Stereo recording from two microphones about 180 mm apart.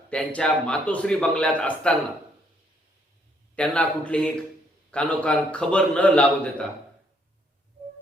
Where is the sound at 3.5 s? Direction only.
5° left (ahead or behind).